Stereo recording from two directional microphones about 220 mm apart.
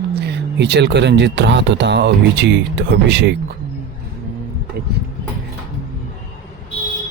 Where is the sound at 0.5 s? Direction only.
55° right (ahead or behind).